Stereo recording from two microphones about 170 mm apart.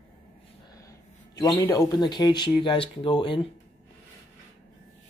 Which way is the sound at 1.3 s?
25° left (ahead or behind).